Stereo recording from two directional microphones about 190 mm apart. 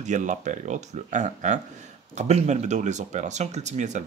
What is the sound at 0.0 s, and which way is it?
Speech, 40° right (ahead or behind).